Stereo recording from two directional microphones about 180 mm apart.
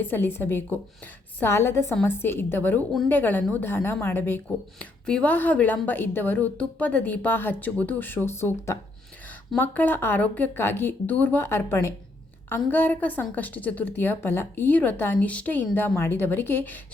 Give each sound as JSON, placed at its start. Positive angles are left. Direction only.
{"t": 0.0, "sound": "a woman's voice", "side_deg": 10}